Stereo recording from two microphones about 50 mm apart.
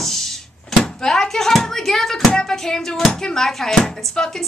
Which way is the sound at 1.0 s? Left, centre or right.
Centre.